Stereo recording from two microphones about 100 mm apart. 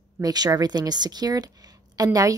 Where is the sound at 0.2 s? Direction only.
40° right (ahead or behind).